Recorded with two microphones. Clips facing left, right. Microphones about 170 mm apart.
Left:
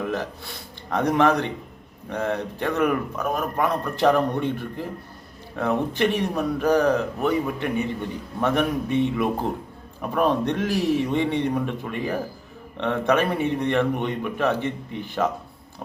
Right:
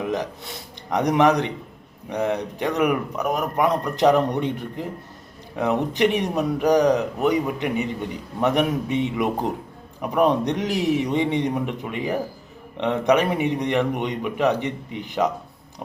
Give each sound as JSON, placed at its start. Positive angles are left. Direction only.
{"t": 0.0, "sound": "a man's voice", "side_deg": -15}